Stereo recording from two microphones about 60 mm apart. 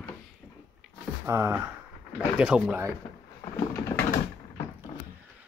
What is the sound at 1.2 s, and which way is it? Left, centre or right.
Speech, right.